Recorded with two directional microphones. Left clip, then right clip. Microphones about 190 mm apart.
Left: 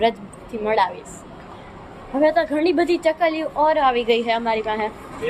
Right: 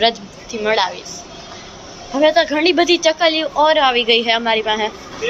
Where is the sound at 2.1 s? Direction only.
Centre (ahead or behind).